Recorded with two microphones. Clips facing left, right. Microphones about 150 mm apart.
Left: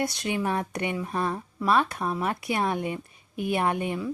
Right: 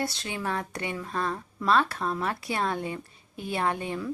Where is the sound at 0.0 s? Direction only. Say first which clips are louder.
Left 4 dB; 20° left (ahead or behind).